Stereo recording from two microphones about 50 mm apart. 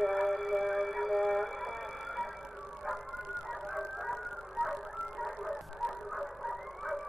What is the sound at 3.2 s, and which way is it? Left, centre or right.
Emergency vehicle, centre.